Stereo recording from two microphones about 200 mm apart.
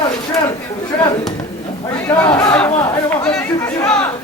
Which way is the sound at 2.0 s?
15° left (ahead or behind).